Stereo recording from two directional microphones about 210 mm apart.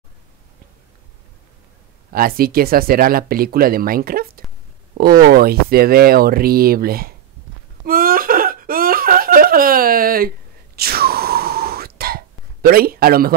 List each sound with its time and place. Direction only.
2.1 s speech: 45° right (ahead or behind)
7.8 s a sound: 45° right (ahead or behind)
10.8 s whispering: 45° right (ahead or behind)
12.6 s speech: 45° right (ahead or behind)